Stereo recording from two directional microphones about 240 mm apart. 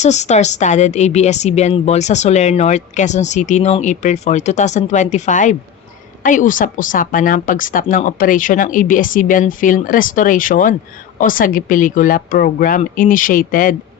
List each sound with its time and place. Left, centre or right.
0.0 s a woman's voice: left